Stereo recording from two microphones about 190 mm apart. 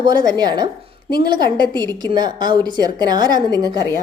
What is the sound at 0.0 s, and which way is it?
A woman's voice, 20° right (ahead or behind).